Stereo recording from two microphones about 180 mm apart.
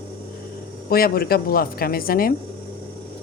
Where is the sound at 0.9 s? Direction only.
55° left (ahead or behind).